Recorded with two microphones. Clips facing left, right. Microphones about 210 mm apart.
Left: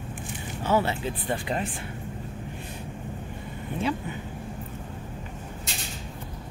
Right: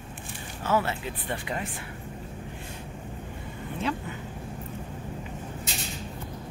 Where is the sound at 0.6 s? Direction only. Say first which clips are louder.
Left 2 dB; 20° left (ahead or behind).